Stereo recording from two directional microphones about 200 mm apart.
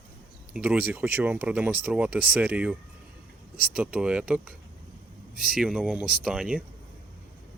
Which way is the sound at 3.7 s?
5° right (ahead or behind).